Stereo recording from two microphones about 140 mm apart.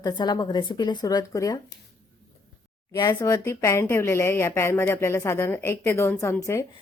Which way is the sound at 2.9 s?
25° left (ahead or behind).